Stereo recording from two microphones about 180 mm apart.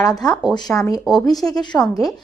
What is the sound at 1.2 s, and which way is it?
Speech, 20° left (ahead or behind).